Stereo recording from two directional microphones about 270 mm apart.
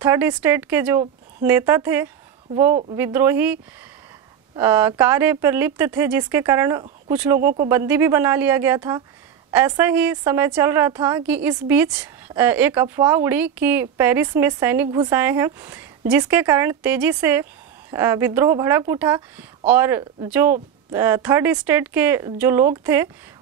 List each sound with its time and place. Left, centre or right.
0.0 s a woman's voice: centre
2.7 s speech: right
3.0 s a woman's voice: centre
4.6 s a woman's voice: centre